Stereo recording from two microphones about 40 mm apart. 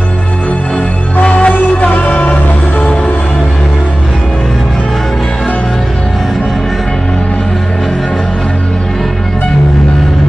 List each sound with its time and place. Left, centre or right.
1.2 s music: left